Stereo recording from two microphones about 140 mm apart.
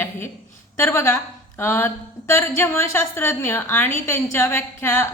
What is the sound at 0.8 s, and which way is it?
A woman's voice, 15° left (ahead or behind).